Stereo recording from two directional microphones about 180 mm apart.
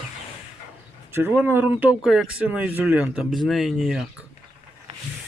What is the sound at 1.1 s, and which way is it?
Speech, 10° right (ahead or behind).